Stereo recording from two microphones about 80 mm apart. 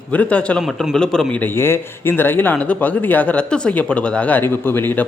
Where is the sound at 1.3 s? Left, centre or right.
Left.